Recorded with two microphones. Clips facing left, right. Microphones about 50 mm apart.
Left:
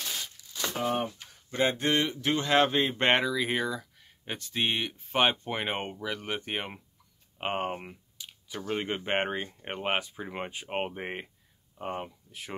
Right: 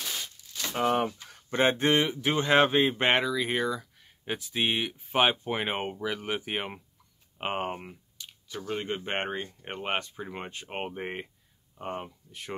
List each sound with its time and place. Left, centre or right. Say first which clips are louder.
0.0 s a sound: right 1 dB; centre
0.7 s speech: right 5 dB; right
1.5 s speech: right 3 dB; right
2.0 s speech: right 2 dB; centre